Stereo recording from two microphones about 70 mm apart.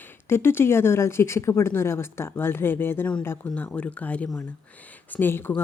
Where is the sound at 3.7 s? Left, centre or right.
Centre.